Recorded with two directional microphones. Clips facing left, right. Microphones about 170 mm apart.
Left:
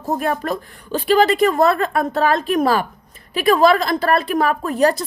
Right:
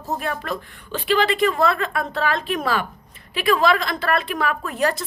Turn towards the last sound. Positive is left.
turn(degrees=40)  # may be behind; listen again after turning